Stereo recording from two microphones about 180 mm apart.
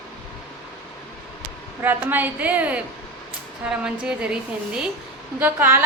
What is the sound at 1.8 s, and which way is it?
A man's voice, 10° right (ahead or behind).